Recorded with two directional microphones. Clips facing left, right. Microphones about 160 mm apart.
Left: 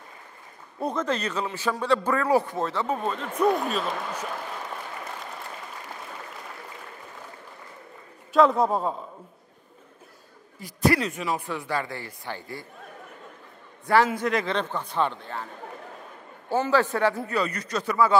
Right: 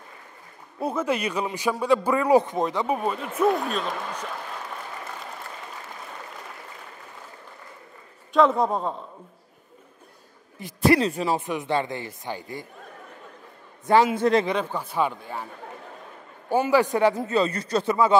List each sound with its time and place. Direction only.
0.7 s a man's voice: 5° right (ahead or behind)
8.3 s a man's voice: centre (ahead or behind)
10.6 s a man's voice: 30° right (ahead or behind)
11.4 s a man's voice: 20° right (ahead or behind)
13.8 s a man's voice: 20° right (ahead or behind)
16.4 s a man's voice: 15° right (ahead or behind)